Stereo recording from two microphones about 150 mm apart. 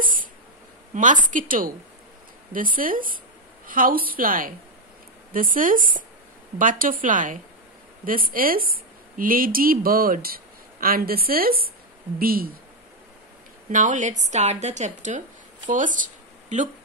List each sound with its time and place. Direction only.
0.0 s a sound: 65° right (ahead or behind)
0.9 s a woman's voice: 55° right (ahead or behind); by 12.5 s 75° right (ahead or behind)
13.7 s a woman's voice: 55° right (ahead or behind)